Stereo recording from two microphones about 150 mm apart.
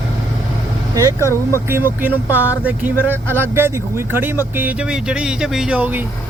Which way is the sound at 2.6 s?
10° right (ahead or behind).